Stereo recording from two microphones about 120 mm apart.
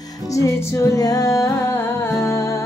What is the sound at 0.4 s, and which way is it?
Female singing, 30° left (ahead or behind).